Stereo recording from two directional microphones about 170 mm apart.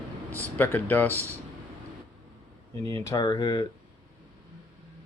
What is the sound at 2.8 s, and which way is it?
Speech, 20° left (ahead or behind).